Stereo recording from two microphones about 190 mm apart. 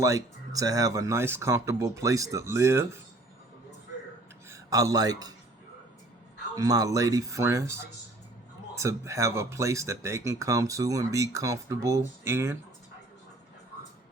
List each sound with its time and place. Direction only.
0.0 s speech: 15° right (ahead or behind)
4.4 s speech: 15° right (ahead or behind)
6.6 s speech: 20° right (ahead or behind)